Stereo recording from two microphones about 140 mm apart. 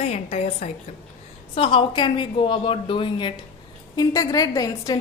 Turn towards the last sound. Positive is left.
turn(degrees=25)  # may be behind; listen again after turning